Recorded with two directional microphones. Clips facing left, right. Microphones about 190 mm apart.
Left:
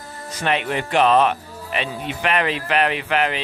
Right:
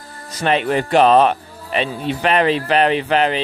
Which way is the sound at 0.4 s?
35° right (ahead or behind).